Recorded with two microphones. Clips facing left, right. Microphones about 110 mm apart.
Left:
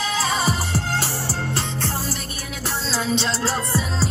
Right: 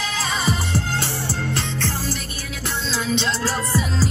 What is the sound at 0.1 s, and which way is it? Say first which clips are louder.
Music: left 1 dB; 35° left (ahead or behind).